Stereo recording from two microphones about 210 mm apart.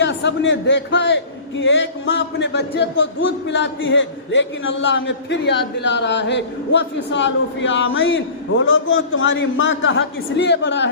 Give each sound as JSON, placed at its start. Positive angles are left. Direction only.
{"t": 0.0, "sound": "a man's voice", "side_deg": 55}